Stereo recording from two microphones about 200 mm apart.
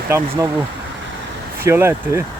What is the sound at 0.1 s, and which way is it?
Speech, 10° right (ahead or behind).